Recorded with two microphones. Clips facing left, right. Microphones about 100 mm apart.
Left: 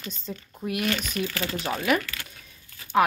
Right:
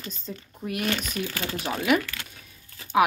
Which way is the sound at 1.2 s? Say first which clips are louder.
Left 1 dB; 15° right (ahead or behind).